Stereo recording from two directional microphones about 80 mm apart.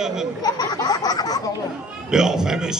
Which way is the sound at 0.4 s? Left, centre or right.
Left.